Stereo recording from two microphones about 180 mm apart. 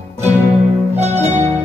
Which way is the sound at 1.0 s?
40° right (ahead or behind).